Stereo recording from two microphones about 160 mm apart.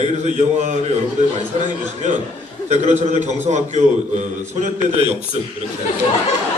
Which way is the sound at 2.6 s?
45° right (ahead or behind).